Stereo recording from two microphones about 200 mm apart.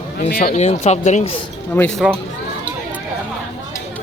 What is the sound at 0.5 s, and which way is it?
Speech, 30° left (ahead or behind).